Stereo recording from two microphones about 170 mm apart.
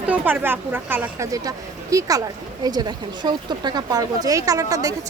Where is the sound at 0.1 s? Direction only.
10° right (ahead or behind).